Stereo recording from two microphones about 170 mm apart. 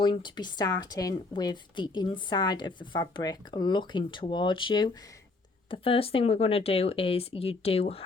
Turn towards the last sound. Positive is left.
turn(degrees=35)  # may be behind; listen again after turning